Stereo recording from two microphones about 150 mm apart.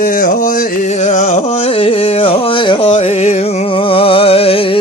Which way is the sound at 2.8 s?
50° left (ahead or behind).